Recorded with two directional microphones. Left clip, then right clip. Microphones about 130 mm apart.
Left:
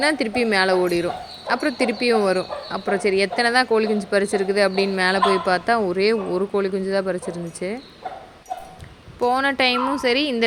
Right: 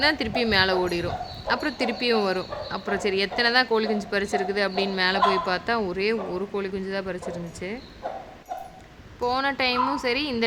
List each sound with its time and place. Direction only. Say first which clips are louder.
0.0 s speech: left 3 dB; 15° left (ahead or behind)
9.2 s speech: left 5 dB; 20° left (ahead or behind)